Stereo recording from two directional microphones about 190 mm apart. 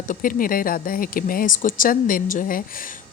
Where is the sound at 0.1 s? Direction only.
45° left (ahead or behind).